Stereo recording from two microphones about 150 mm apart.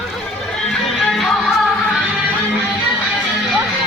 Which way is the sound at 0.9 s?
Centre (ahead or behind).